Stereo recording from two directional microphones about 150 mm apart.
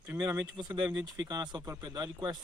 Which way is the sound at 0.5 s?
30° right (ahead or behind).